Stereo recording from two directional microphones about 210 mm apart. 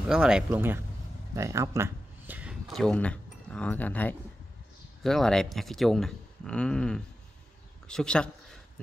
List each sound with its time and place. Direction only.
0.1 s speech: 5° right (ahead or behind)